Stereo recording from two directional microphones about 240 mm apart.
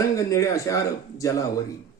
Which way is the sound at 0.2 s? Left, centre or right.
Centre.